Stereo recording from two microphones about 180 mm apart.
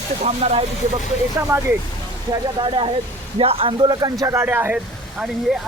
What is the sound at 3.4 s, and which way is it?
Speech, 30° right (ahead or behind).